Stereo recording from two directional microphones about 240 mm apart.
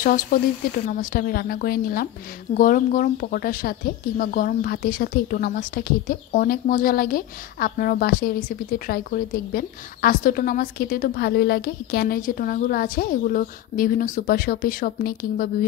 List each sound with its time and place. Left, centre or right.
0.0 s speech: left